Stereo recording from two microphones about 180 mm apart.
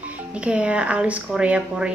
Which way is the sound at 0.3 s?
5° right (ahead or behind).